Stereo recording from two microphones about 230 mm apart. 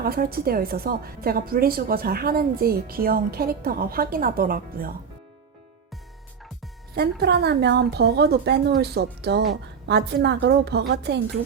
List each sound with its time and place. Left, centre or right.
0.0 s a woman's voice: right
6.9 s a woman's voice: right